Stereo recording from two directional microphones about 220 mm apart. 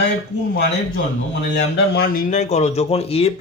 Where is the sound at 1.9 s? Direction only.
40° left (ahead or behind); by 3.3 s 25° left (ahead or behind).